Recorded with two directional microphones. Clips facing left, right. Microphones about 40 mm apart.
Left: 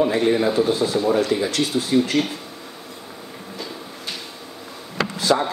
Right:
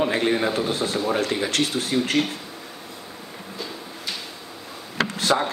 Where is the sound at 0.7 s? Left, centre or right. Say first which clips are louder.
Left 4 dB; right.